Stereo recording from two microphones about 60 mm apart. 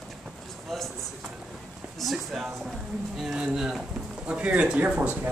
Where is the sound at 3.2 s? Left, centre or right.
Centre.